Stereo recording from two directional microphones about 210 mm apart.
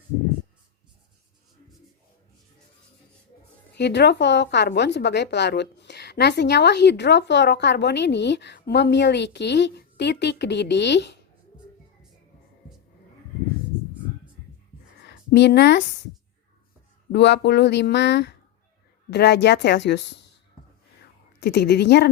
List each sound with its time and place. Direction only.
3.8 s a woman's voice: 55° left (ahead or behind)
15.0 s a sound: 50° left (ahead or behind)
17.1 s a woman's voice: 55° left (ahead or behind)
21.4 s a woman's voice: 50° left (ahead or behind)